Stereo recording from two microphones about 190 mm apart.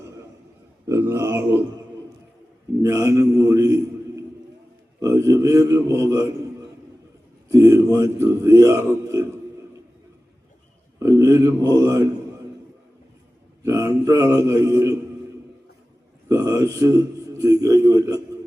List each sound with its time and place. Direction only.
0.9 s speech: 15° right (ahead or behind)
2.8 s a man's voice: 15° right (ahead or behind)
7.5 s a man's voice: 15° right (ahead or behind)
11.0 s speech: 15° right (ahead or behind)
13.7 s a man's voice: 15° right (ahead or behind)
16.3 s a man's voice: 15° right (ahead or behind)